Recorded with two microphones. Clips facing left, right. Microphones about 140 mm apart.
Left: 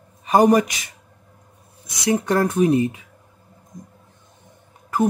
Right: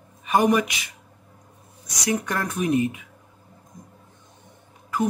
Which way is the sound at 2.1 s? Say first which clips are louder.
Left 7 dB; 30° left (ahead or behind).